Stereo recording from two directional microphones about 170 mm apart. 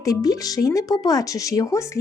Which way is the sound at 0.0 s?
20° left (ahead or behind).